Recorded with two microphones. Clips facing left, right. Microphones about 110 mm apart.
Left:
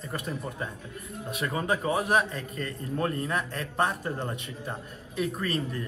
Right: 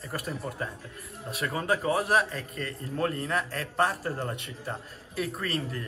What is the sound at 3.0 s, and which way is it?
Speech, 20° left (ahead or behind).